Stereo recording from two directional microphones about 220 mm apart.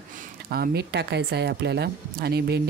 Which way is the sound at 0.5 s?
45° right (ahead or behind).